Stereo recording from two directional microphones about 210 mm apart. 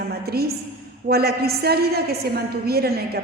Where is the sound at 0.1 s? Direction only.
50° right (ahead or behind).